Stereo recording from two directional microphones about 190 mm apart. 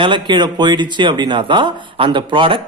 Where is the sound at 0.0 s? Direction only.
25° right (ahead or behind).